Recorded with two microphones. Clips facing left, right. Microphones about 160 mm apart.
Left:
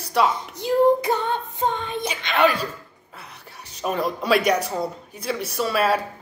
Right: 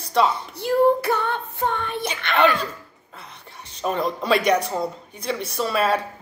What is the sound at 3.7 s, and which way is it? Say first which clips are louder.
Speech: right 1 dB; 10° left (ahead or behind).